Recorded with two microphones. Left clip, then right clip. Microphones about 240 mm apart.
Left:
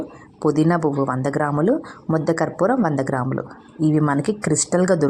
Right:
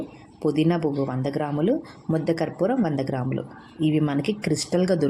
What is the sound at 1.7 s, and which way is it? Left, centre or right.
A woman's voice, centre.